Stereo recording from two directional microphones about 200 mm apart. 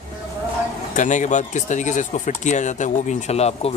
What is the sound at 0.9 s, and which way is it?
Speech, 40° left (ahead or behind).